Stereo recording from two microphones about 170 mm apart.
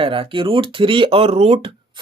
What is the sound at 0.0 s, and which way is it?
Speech, 30° right (ahead or behind).